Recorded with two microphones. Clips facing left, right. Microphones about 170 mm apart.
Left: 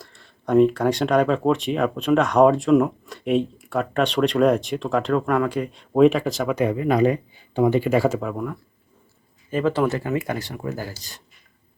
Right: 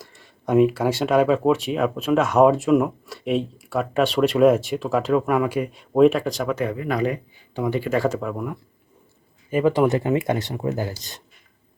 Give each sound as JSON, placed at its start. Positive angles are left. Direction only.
{"t": 0.0, "sound": "speech", "side_deg": -10}
{"t": 6.6, "sound": "speech", "side_deg": 20}
{"t": 7.8, "sound": "speech", "side_deg": 10}
{"t": 9.5, "sound": "speech", "side_deg": -10}